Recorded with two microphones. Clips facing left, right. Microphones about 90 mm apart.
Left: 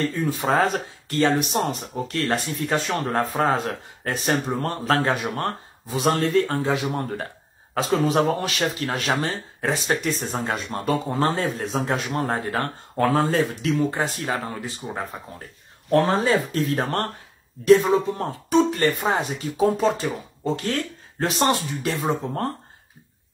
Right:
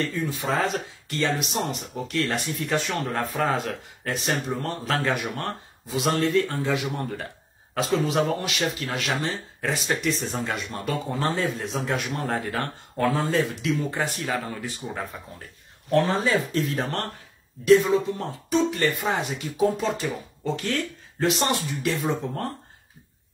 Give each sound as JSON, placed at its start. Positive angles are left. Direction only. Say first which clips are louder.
{"t": 0.0, "sound": "speech", "louder": "left 4 dB", "side_deg": 40}
{"t": 5.0, "sound": "a man's voice", "louder": "left 3 dB", "side_deg": 30}
{"t": 13.8, "sound": "speech", "louder": "left 3 dB", "side_deg": 30}
{"t": 15.9, "sound": "speech", "louder": "left 3 dB", "side_deg": 40}